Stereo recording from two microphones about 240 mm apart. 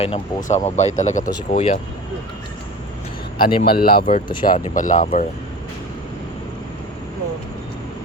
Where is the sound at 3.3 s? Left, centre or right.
Left.